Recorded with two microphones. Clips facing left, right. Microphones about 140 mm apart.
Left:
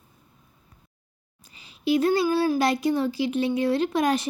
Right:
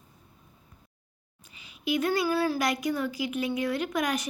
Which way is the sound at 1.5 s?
35° left (ahead or behind).